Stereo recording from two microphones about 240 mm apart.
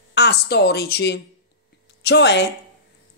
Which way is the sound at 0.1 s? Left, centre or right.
Left.